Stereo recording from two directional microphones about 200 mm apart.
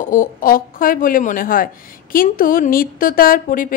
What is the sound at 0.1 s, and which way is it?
A woman's voice, 45° left (ahead or behind).